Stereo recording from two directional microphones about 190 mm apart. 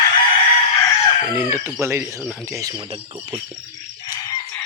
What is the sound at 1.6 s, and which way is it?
Speech, 10° right (ahead or behind).